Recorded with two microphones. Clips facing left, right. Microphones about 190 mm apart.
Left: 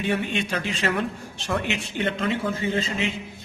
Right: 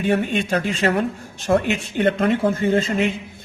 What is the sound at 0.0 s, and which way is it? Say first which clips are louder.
Speech: right 5 dB; 45° right (ahead or behind).